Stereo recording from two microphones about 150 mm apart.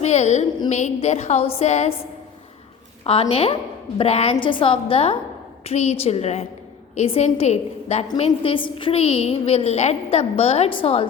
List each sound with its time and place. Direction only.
0.0 s a woman's voice: 50° left (ahead or behind)
3.0 s a woman's voice: 40° left (ahead or behind)
8.2 s a woman's voice: 35° left (ahead or behind)